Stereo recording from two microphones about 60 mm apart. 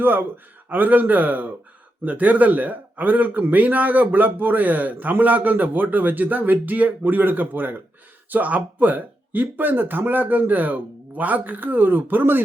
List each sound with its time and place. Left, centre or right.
0.0 s a man's voice: right